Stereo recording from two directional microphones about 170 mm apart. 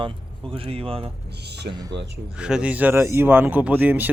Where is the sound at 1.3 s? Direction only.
75° right (ahead or behind).